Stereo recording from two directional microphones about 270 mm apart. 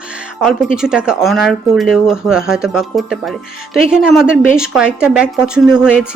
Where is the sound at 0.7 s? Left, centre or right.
Centre.